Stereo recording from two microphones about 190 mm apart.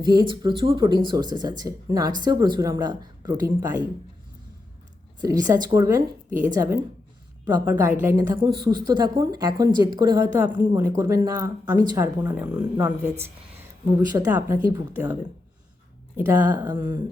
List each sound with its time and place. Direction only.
0.0 s speech: 20° right (ahead or behind)
5.2 s a woman's voice: 20° right (ahead or behind)